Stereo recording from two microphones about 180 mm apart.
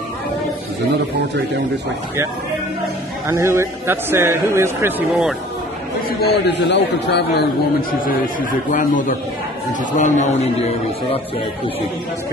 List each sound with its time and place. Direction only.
3.3 s a man's voice: 15° right (ahead or behind)
6.0 s a man's voice: 65° left (ahead or behind)
9.7 s a man's voice: 45° left (ahead or behind)